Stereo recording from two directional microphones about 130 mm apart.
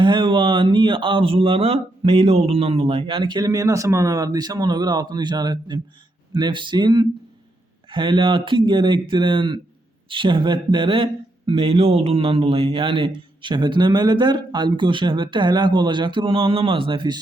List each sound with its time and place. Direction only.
0.0 s speech: 40° right (ahead or behind)